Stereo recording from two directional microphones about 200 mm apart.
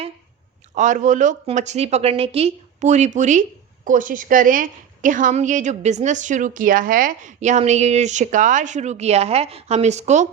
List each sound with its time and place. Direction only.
0.8 s a woman's voice: 40° right (ahead or behind)